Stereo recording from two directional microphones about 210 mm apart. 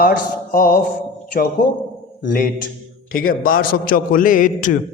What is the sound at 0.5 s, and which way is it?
Speech, 40° left (ahead or behind).